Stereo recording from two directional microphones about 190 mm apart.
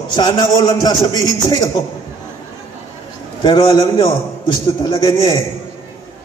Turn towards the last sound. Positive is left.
turn(degrees=20)  # may be behind; listen again after turning